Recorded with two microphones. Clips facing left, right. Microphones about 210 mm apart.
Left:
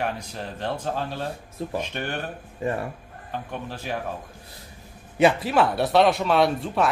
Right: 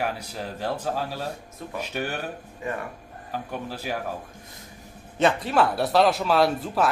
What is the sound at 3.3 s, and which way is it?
Speech, 5° right (ahead or behind).